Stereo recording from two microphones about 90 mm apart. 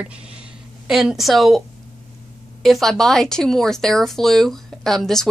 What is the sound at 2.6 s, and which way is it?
Speech, 5° left (ahead or behind).